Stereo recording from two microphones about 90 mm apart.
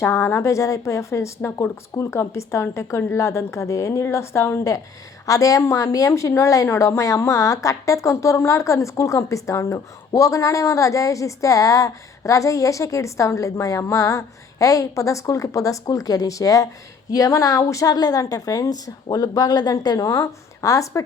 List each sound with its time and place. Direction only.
0.0 s a woman's voice: 30° left (ahead or behind)